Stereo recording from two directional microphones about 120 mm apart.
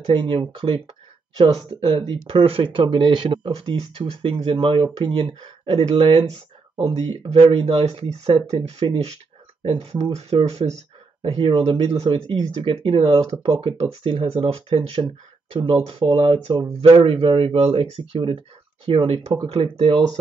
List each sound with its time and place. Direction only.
0.0 s speech: 45° right (ahead or behind); by 12.2 s 60° right (ahead or behind)
12.3 s speech: 40° right (ahead or behind)